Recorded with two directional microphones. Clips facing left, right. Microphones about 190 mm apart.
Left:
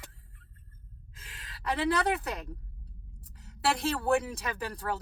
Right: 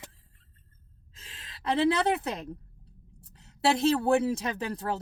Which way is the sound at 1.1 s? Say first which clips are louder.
Even; 25° right (ahead or behind).